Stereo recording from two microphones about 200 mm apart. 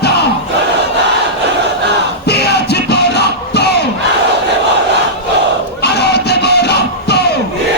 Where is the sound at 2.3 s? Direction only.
55° left (ahead or behind).